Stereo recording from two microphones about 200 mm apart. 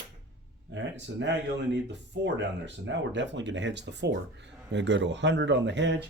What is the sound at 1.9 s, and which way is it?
Speech, 60° right (ahead or behind).